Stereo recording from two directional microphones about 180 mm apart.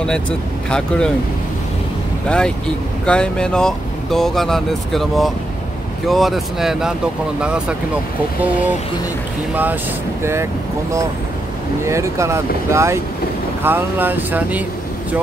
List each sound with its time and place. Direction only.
0.7 s speech: 5° left (ahead or behind)
2.2 s speech: 5° left (ahead or behind)